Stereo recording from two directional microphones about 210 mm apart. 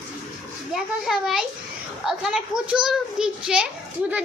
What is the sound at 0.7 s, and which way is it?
A child's voice, centre (ahead or behind).